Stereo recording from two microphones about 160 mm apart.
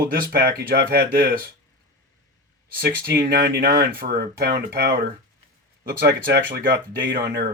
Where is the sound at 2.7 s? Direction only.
70° right (ahead or behind).